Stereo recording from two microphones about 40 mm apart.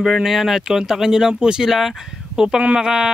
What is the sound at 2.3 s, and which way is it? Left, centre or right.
Speech, centre.